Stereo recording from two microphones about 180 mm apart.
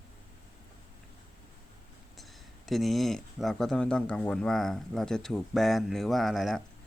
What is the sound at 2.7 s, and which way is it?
Speech, centre (ahead or behind).